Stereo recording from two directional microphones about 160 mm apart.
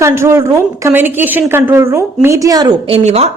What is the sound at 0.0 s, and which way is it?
A woman's voice, 15° right (ahead or behind).